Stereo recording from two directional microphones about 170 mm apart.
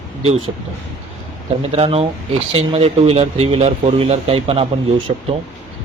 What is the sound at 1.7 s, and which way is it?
A man's voice, 35° right (ahead or behind).